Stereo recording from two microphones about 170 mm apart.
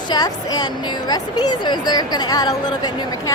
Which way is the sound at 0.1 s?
25° left (ahead or behind).